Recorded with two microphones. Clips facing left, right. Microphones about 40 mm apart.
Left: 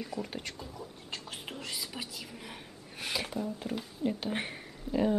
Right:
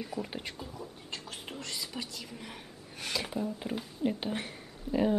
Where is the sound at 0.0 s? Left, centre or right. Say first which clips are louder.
Even; centre.